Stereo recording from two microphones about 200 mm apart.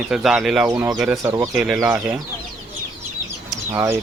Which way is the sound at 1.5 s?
Centre (ahead or behind).